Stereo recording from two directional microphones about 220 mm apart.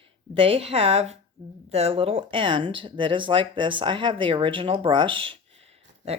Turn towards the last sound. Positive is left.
turn(degrees=-25)  # may be behind; listen again after turning